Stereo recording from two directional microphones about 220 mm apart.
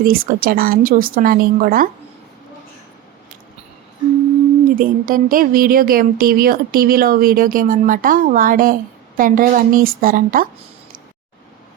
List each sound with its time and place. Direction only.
0.0 s a woman's voice: 40° right (ahead or behind)
4.8 s a woman's voice: 40° right (ahead or behind)